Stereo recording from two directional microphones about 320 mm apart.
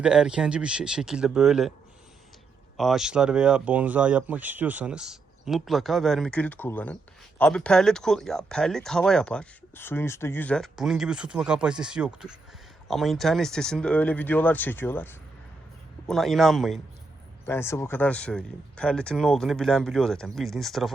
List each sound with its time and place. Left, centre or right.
0.0 s speech: centre
2.7 s speech: centre